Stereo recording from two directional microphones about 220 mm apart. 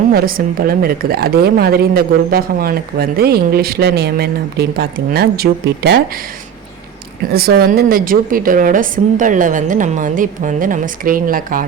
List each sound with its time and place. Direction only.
0.1 s a woman's voice: 40° right (ahead or behind)
7.3 s a woman's voice: 45° right (ahead or behind)